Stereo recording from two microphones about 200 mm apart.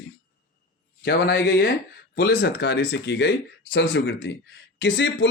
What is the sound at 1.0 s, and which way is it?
Speech, 60° left (ahead or behind).